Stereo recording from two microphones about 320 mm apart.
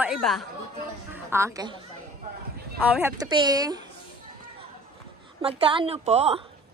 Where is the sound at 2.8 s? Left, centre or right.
Centre.